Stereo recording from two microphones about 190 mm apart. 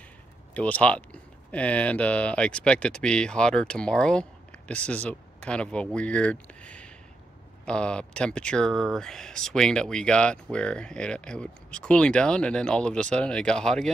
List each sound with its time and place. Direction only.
0.6 s speech: 5° left (ahead or behind)